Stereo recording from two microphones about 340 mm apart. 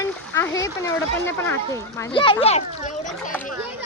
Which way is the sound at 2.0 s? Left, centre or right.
Centre.